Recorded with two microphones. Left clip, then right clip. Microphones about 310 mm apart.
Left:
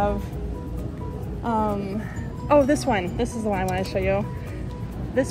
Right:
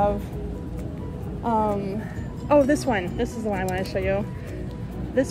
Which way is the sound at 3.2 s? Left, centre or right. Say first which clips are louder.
Left 1 dB; left.